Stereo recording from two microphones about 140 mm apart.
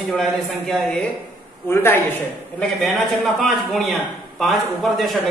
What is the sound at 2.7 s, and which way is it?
A man's voice, centre (ahead or behind).